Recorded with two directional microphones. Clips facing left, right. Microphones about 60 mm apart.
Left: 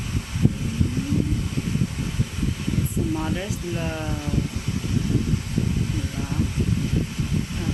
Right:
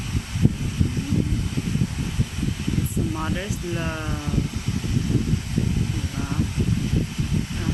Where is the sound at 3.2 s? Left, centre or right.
Centre.